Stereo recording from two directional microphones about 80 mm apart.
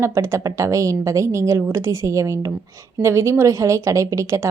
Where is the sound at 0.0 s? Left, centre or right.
Right.